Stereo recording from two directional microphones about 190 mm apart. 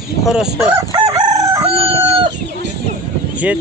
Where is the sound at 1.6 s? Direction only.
30° right (ahead or behind).